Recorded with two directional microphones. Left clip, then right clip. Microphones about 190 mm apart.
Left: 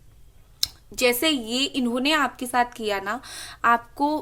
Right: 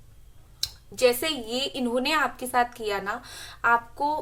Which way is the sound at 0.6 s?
40° left (ahead or behind).